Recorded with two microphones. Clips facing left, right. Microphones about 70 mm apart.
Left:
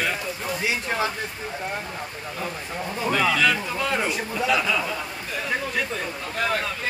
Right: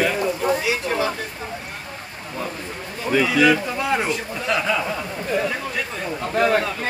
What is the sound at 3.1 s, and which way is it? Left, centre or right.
Speech, centre.